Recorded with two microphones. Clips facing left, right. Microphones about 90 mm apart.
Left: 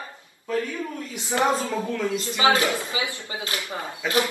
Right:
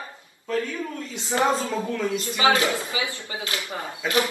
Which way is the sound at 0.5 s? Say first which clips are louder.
Even; 10° left (ahead or behind).